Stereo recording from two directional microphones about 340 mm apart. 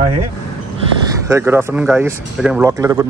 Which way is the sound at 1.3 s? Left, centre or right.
Centre.